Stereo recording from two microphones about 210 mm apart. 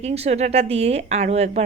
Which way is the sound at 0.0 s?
30° right (ahead or behind).